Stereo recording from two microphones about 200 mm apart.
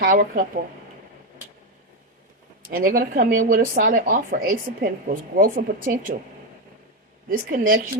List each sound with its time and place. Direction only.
0.0 s a woman's voice: 45° right (ahead or behind)
2.6 s a woman's voice: 45° right (ahead or behind)
7.3 s a woman's voice: 45° right (ahead or behind)